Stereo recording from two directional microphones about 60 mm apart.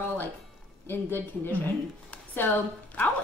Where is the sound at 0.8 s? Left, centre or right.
Left.